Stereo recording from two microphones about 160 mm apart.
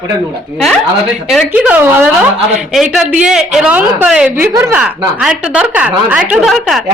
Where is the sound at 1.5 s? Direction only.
10° right (ahead or behind).